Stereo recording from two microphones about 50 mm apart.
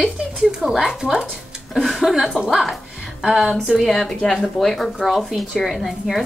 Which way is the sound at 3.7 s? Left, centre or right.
Centre.